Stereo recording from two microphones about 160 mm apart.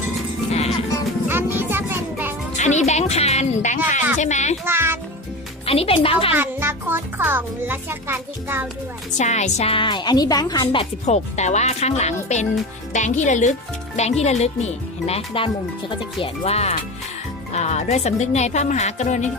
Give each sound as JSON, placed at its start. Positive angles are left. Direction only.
{"t": 1.3, "sound": "music", "side_deg": -15}
{"t": 2.6, "sound": "a woman's voice", "side_deg": 45}
{"t": 4.6, "sound": "a child's voice", "side_deg": -15}
{"t": 5.6, "sound": "a woman's voice", "side_deg": 35}
{"t": 6.3, "sound": "a child's voice", "side_deg": -15}
{"t": 9.1, "sound": "a woman's voice", "side_deg": 45}
{"t": 11.0, "sound": "a woman's voice", "side_deg": 45}